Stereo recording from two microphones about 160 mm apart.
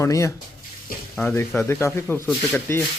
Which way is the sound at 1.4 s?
15° left (ahead or behind).